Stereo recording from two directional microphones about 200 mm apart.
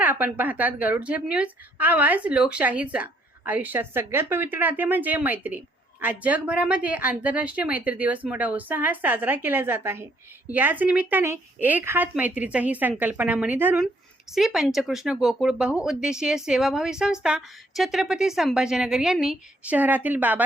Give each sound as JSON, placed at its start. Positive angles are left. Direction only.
{"t": 0.0, "sound": "speech", "side_deg": -10}